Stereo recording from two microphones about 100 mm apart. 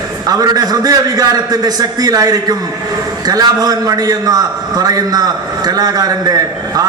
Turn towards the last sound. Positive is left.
turn(degrees=-35)  # may be behind; listen again after turning